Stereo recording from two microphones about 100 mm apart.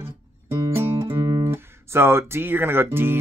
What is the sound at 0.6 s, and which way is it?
Guitar, 35° right (ahead or behind).